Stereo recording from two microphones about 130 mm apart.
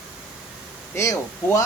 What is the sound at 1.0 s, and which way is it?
Speech, 25° left (ahead or behind).